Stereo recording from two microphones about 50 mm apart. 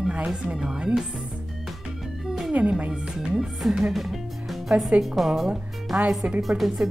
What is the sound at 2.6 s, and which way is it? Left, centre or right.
Speech, right.